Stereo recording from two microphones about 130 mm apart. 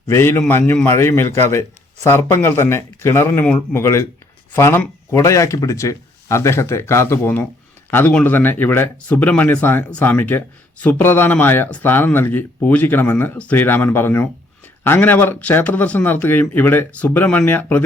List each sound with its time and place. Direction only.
0.1 s a man's voice: 20° left (ahead or behind)